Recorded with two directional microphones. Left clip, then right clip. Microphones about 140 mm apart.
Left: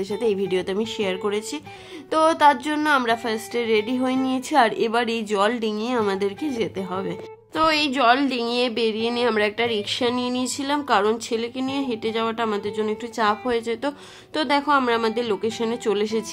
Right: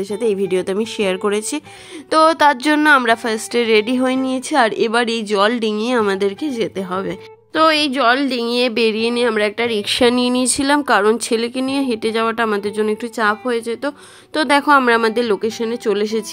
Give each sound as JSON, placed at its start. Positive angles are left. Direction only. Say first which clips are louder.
{"t": 0.1, "sound": "speech", "louder": "right 5 dB", "side_deg": -30}
{"t": 13.3, "sound": "a woman's voice", "louder": "right 4 dB", "side_deg": -25}
{"t": 14.5, "sound": "speech", "louder": "right 7 dB", "side_deg": -45}
{"t": 15.6, "sound": "a woman's voice", "louder": "right 4 dB", "side_deg": -25}